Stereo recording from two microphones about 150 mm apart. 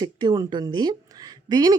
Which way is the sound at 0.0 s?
25° right (ahead or behind).